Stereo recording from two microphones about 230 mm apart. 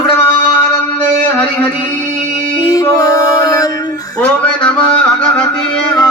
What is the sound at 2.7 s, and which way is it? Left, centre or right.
Music, centre.